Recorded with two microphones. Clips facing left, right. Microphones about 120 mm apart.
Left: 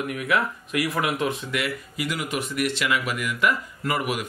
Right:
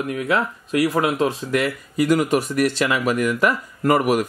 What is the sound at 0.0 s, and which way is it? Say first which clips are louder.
Speech: right 3 dB; 30° right (ahead or behind).